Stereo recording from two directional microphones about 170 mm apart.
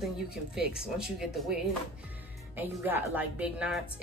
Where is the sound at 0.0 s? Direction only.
5° right (ahead or behind).